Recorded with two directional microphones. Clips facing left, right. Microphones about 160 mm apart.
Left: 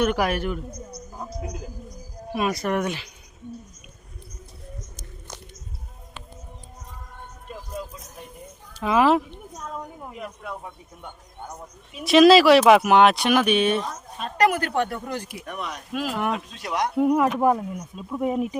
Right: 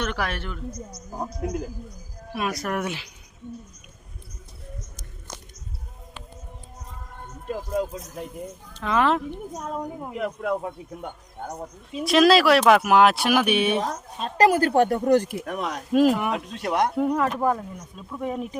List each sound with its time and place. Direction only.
0.0 s speech: 10° left (ahead or behind)
0.7 s speech: 60° left (ahead or behind)
2.3 s speech: centre (ahead or behind)
7.4 s speech: 85° right
8.8 s speech: 5° left (ahead or behind)
9.7 s speech: 20° right (ahead or behind)
10.2 s speech: 85° right
11.0 s speech: 45° right (ahead or behind)
12.0 s speech: centre (ahead or behind)
14.2 s speech: 25° right (ahead or behind); by 15.4 s 45° right (ahead or behind)
15.4 s speech: 90° right
15.9 s speech: 45° right (ahead or behind)
16.3 s speech: 55° right (ahead or behind)
17.0 s speech: 10° left (ahead or behind)